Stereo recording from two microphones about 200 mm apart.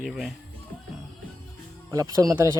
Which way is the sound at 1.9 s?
20° right (ahead or behind).